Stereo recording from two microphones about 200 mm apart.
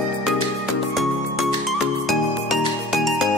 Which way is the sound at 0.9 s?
Centre (ahead or behind).